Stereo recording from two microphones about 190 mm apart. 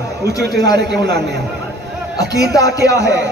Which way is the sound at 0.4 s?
60° right (ahead or behind).